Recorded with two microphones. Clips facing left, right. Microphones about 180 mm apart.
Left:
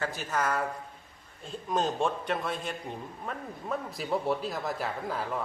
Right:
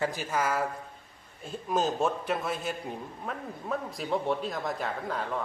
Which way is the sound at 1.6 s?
5° right (ahead or behind).